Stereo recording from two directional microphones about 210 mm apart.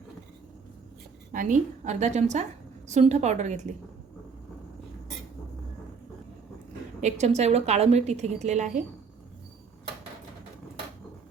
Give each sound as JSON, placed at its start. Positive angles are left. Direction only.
{"t": 1.3, "sound": "a woman's voice", "side_deg": -40}
{"t": 7.0, "sound": "a woman's voice", "side_deg": -30}